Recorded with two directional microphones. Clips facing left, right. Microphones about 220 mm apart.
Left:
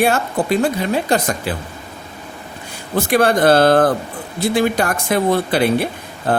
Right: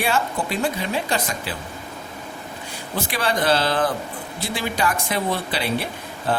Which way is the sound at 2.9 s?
50° left (ahead or behind).